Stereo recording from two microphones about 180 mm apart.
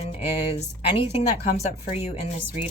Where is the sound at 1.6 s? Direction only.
35° left (ahead or behind).